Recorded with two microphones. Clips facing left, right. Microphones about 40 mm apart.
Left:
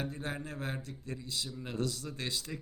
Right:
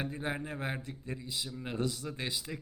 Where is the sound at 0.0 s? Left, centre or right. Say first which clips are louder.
Right 2 dB; right.